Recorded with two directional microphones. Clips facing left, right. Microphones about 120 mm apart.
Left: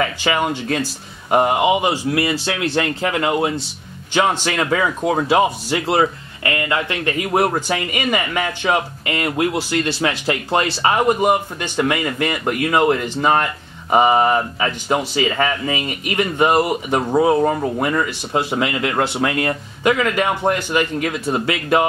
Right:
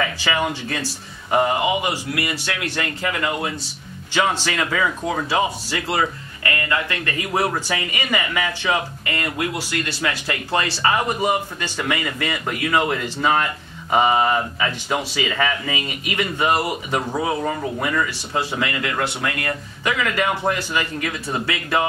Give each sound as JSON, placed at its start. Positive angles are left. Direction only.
{"t": 0.2, "sound": "speech", "side_deg": 25}